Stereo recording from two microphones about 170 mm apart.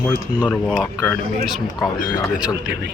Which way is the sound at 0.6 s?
5° right (ahead or behind).